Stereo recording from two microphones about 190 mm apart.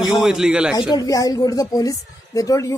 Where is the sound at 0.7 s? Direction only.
20° left (ahead or behind).